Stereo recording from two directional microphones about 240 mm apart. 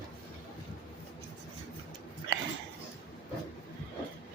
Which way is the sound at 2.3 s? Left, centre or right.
Right.